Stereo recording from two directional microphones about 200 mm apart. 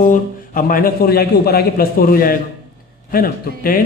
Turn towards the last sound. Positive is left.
turn(degrees=45)  # may be behind; listen again after turning